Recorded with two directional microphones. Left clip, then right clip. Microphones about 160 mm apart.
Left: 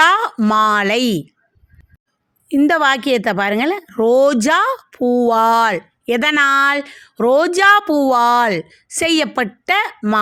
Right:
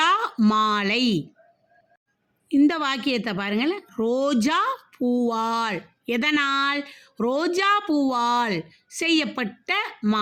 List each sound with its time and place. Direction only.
0.0 s a sound: 50° left (ahead or behind)
0.5 s a woman's voice: 50° left (ahead or behind)
2.5 s a woman's voice: 50° left (ahead or behind)